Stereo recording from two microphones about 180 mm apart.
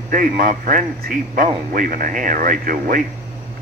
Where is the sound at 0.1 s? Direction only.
50° right (ahead or behind).